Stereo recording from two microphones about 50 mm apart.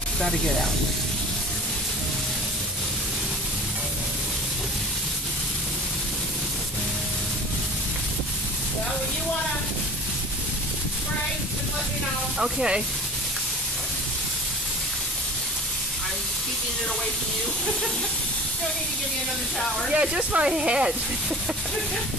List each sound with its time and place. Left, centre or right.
12.4 s speech: centre
19.9 s speech: right